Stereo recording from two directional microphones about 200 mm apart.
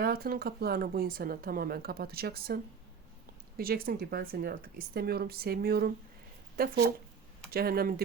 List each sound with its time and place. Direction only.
0.0 s speech: 50° right (ahead or behind)
3.6 s speech: 50° right (ahead or behind)